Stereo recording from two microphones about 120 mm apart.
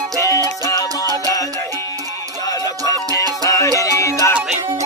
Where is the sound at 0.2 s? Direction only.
25° left (ahead or behind).